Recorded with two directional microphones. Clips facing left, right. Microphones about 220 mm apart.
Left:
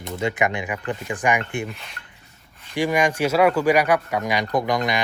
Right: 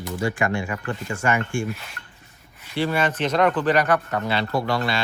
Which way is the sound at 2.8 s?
15° left (ahead or behind).